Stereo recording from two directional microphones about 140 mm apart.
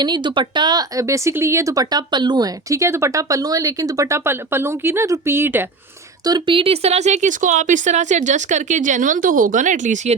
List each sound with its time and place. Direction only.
0.0 s speech: 35° right (ahead or behind); by 5.6 s 15° right (ahead or behind)
6.2 s speech: 30° right (ahead or behind); by 10.2 s 60° right (ahead or behind)